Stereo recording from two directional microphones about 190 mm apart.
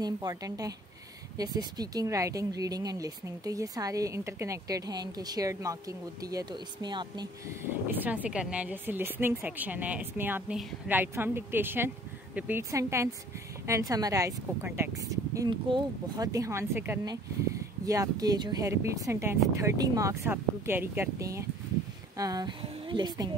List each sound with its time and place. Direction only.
0.0 s speech: 20° right (ahead or behind)
7.9 s a woman's voice: 10° right (ahead or behind)